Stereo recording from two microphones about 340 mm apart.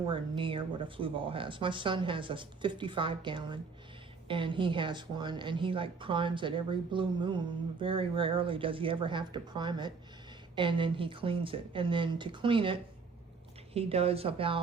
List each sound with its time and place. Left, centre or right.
0.1 s speech: centre